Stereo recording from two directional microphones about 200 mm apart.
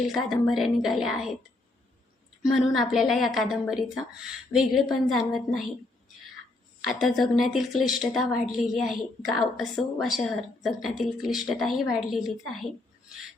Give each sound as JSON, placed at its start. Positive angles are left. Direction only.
{"t": 0.1, "sound": "a woman's voice", "side_deg": 0}
{"t": 2.4, "sound": "a woman's voice", "side_deg": 0}
{"t": 6.8, "sound": "a woman's voice", "side_deg": 0}